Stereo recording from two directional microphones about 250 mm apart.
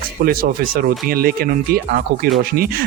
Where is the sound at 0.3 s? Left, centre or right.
Right.